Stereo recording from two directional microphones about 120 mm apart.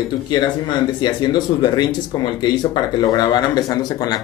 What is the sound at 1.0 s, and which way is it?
Speech, 40° left (ahead or behind).